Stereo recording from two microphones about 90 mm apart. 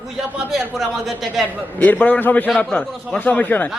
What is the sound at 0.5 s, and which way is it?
Speech, centre (ahead or behind).